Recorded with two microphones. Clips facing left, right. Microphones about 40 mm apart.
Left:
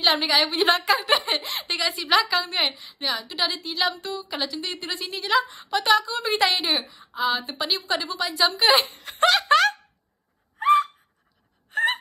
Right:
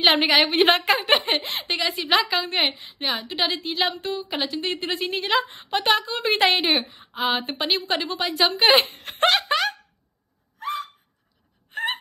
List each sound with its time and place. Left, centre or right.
0.0 s a woman's voice: right
9.5 s a sound: centre
11.7 s hiccup: centre